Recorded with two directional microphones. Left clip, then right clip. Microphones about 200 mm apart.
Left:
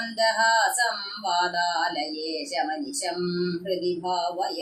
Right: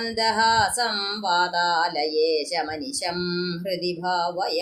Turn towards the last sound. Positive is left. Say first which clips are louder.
# right 1 dB
turn(degrees=-55)  # may be behind; listen again after turning